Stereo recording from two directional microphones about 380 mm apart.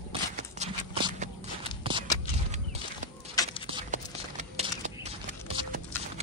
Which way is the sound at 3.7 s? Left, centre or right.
Centre.